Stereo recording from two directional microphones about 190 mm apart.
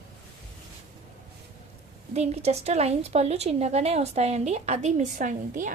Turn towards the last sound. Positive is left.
turn(degrees=-40)  # may be behind; listen again after turning